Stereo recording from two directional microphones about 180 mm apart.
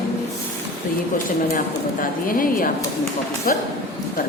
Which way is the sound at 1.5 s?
50° left (ahead or behind).